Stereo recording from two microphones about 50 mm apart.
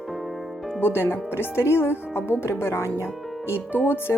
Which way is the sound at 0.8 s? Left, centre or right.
Left.